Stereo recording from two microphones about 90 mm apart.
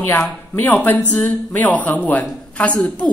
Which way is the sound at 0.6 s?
20° left (ahead or behind).